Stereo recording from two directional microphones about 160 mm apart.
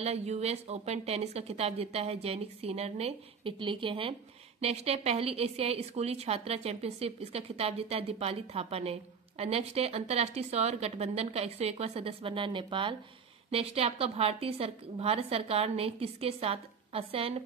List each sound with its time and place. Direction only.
0.0 s a woman's voice: 40° right (ahead or behind)